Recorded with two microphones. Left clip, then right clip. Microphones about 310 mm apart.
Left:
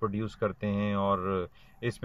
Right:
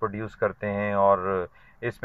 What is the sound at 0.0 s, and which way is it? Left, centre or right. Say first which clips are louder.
A man's voice: right 4 dB; right.